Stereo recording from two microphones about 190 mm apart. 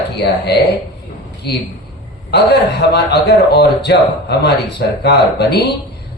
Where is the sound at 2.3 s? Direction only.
60° left (ahead or behind).